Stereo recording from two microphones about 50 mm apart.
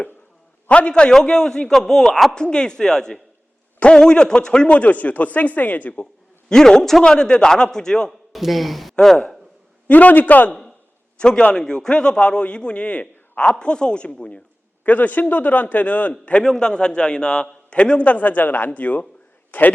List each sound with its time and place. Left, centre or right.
0.7 s a man's voice: left; by 2.3 s centre
2.3 s a man's voice: centre
4.8 s a man's voice: left
6.5 s a man's voice: centre
8.3 s speech: centre
9.8 s a man's voice: left
11.2 s a man's voice: centre
14.8 s a man's voice: left